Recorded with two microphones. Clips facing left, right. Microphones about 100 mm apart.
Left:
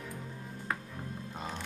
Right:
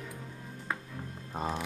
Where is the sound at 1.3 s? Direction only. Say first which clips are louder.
Right 9 dB; 40° right (ahead or behind).